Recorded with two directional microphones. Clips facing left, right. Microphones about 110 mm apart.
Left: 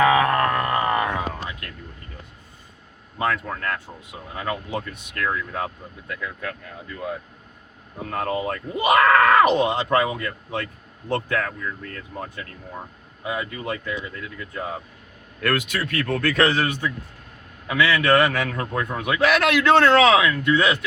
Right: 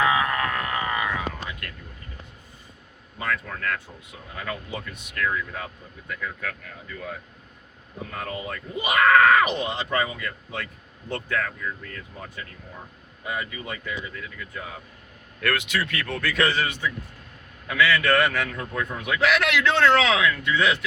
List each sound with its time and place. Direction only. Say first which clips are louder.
0.0 s a sound: left 5 dB; 65° left (ahead or behind)
0.3 s a sound: left 6 dB; 45° left (ahead or behind)
3.5 s speech: left 5 dB; 35° left (ahead or behind)
4.4 s a man's voice: left 5 dB; 50° left (ahead or behind)
8.1 s a man's voice: left 8 dB; 55° left (ahead or behind)
13.2 s speech: left 4 dB; 60° left (ahead or behind)
15.4 s a man's voice: left 2 dB; 40° left (ahead or behind); by 20.7 s 55° left (ahead or behind)